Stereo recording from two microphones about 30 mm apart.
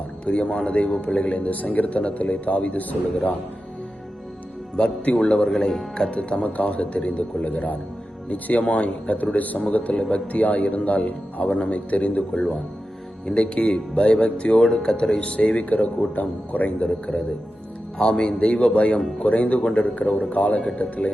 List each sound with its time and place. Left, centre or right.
0.3 s a man's voice: left
1.4 s a man's voice: left
5.1 s speech: left
5.4 s speech: centre
6.1 s a man's voice: left
9.1 s a man's voice: left
9.9 s speech: left
10.3 s a man's voice: left
13.3 s speech: left
15.4 s a man's voice: left
17.9 s a man's voice: left